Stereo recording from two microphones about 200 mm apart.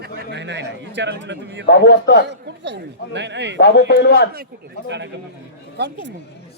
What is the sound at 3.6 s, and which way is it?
Speech, 55° left (ahead or behind).